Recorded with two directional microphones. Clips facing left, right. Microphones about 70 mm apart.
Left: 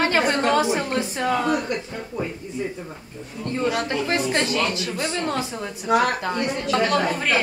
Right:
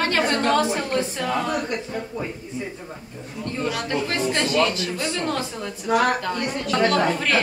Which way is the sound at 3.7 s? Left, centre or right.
Left.